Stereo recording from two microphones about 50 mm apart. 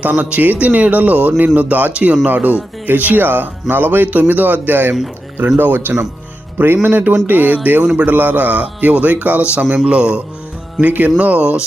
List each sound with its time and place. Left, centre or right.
0.0 s speech: right
6.8 s speech: right
10.8 s speech: right